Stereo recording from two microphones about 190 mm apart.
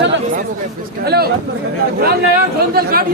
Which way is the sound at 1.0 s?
55° right (ahead or behind).